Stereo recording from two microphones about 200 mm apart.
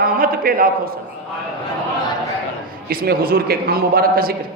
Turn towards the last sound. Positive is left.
turn(degrees=-45)  # may be behind; listen again after turning